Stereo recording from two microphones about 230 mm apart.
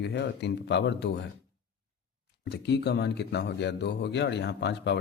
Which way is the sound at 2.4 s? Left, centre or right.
Left.